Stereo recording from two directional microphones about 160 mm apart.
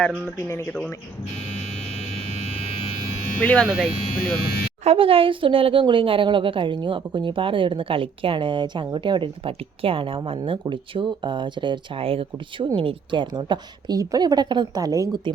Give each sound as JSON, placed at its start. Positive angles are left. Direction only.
{"t": 3.4, "sound": "speech", "side_deg": 5}
{"t": 4.4, "sound": "speech", "side_deg": 75}
{"t": 4.8, "sound": "speech", "side_deg": -40}